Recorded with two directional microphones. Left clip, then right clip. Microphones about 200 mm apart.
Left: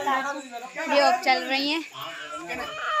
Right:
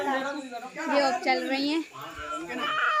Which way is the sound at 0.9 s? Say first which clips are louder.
Left 4 dB; centre (ahead or behind).